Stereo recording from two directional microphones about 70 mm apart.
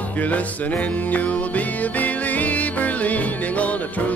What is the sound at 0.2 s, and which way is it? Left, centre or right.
Music, left.